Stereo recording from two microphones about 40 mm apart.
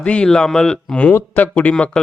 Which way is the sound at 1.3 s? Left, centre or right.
Left.